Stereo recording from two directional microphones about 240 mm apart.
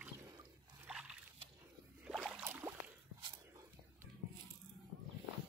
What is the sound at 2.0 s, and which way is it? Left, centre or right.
Boat, centre.